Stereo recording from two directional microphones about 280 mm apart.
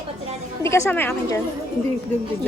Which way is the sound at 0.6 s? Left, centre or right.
Centre.